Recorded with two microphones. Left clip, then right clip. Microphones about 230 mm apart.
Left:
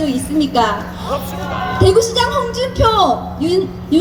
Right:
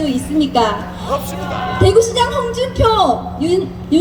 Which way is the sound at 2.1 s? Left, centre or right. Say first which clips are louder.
Even; centre.